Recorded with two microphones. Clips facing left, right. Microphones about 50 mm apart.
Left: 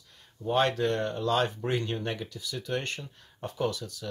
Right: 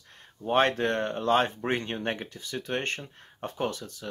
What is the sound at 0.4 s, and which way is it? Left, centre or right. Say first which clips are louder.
Speech: right 2 dB; right.